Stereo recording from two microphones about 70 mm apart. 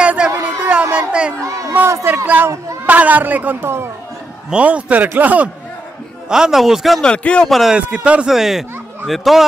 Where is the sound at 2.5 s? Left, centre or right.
Right.